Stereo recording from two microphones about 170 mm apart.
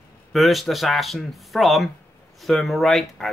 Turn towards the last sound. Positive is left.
turn(degrees=0)  # may be behind; listen again after turning